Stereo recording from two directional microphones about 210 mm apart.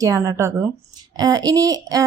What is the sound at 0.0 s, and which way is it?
A woman's voice, 15° right (ahead or behind).